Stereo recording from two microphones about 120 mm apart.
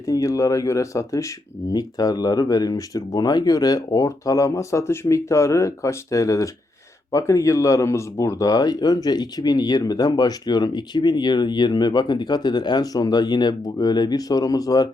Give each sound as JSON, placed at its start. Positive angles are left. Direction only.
{"t": 0.0, "sound": "speech", "side_deg": 30}